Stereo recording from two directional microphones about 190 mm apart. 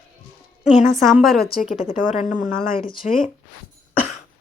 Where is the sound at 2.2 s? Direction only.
45° left (ahead or behind).